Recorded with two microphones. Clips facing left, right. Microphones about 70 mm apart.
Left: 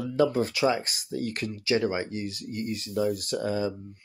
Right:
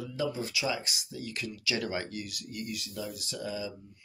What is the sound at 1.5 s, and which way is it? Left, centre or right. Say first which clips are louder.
Speech: left 7 dB; left.